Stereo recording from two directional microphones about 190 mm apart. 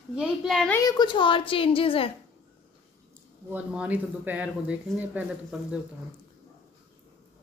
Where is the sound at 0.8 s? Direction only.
20° left (ahead or behind).